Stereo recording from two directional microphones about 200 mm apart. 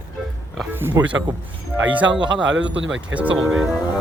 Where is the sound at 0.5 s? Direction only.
5° right (ahead or behind).